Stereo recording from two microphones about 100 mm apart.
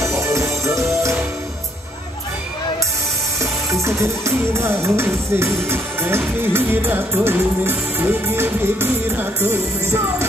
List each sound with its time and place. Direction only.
0.0 s music: 30° right (ahead or behind)
3.8 s music: 30° right (ahead or behind)